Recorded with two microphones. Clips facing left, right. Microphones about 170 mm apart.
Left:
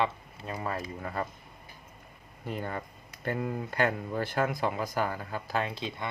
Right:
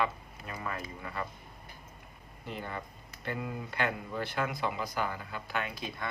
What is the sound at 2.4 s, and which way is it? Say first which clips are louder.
Speech: left 4 dB; 45° left (ahead or behind).